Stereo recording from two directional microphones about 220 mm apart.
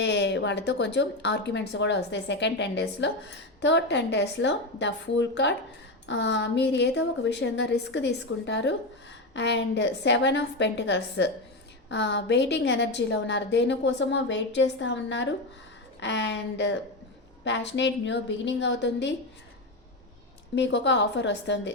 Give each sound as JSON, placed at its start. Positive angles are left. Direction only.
{"t": 0.0, "sound": "a woman's voice", "side_deg": 50}
{"t": 20.6, "sound": "a woman's voice", "side_deg": 55}